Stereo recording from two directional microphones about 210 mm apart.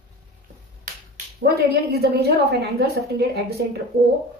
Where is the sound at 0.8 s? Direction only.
45° right (ahead or behind).